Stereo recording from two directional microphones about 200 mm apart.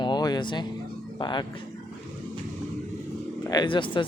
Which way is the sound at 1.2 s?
25° left (ahead or behind).